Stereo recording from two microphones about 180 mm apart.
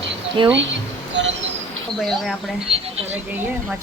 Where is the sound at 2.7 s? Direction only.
30° right (ahead or behind).